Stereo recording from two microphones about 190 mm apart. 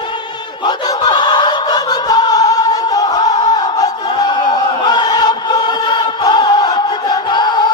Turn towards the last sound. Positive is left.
turn(degrees=25)  # may be behind; listen again after turning